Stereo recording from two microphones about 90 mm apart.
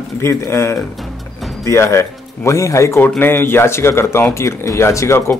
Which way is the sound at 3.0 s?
25° left (ahead or behind).